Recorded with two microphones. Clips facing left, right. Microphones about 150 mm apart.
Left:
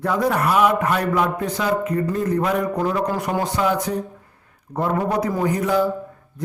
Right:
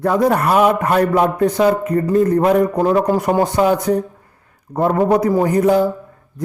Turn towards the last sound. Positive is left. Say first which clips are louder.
# right 6 dB
turn(degrees=-45)  # may be behind; listen again after turning